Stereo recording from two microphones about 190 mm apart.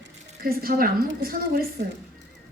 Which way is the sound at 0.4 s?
50° right (ahead or behind).